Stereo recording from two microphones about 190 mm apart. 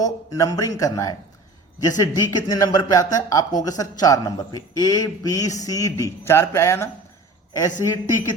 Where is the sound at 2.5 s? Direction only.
20° left (ahead or behind).